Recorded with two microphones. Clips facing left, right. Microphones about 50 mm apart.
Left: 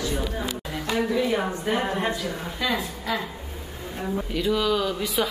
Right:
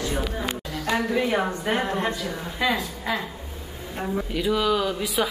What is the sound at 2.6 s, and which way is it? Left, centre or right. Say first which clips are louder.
Speech: right 3 dB; right.